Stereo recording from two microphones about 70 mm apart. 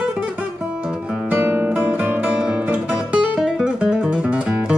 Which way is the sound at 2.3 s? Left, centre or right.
Centre.